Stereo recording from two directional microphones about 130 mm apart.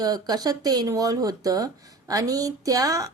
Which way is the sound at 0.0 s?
30° right (ahead or behind).